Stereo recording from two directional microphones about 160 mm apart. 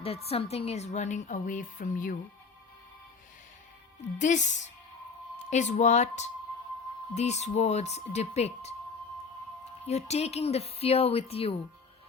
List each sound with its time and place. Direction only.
0.0 s a woman's voice: 40° left (ahead or behind); by 2.1 s 55° left (ahead or behind)
4.2 s a woman's voice: 50° left (ahead or behind)
9.8 s speech: 40° left (ahead or behind)